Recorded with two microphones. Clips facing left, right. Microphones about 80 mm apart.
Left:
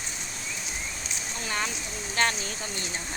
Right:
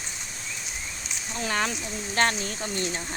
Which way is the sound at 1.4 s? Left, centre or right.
Right.